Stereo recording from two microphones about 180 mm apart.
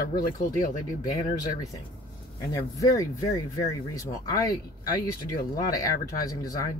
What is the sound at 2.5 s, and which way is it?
Speech, 20° left (ahead or behind).